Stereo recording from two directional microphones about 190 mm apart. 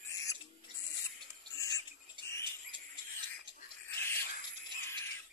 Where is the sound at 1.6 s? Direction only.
15° left (ahead or behind).